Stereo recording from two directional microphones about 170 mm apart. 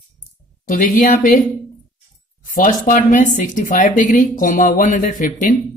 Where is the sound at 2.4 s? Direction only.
50° left (ahead or behind).